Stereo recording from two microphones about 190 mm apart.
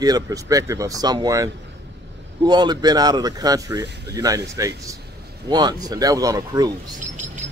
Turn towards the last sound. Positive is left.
turn(degrees=-20)  # may be behind; listen again after turning